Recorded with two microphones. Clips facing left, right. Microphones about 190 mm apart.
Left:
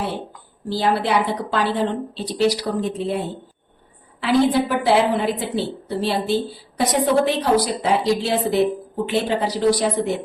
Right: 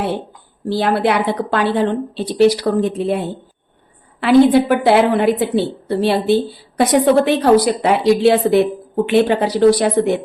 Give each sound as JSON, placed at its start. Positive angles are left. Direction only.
{"t": 0.7, "sound": "a woman's voice", "side_deg": -60}
{"t": 4.2, "sound": "a woman's voice", "side_deg": -60}